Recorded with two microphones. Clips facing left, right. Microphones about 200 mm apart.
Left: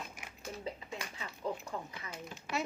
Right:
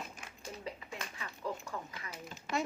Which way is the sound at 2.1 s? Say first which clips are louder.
Right 2 dB; centre (ahead or behind).